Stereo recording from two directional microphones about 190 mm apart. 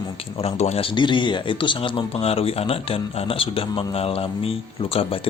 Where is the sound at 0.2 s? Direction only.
35° left (ahead or behind).